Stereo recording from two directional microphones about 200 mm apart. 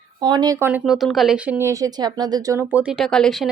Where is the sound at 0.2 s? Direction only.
20° right (ahead or behind).